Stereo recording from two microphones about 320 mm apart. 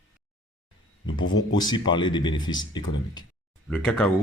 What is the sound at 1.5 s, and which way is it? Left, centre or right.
Speech, centre.